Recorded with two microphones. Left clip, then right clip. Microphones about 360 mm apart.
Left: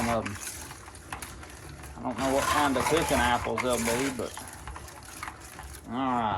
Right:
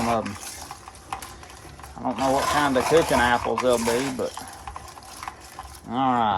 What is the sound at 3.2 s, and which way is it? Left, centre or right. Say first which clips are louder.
Speech: right 6 dB; right.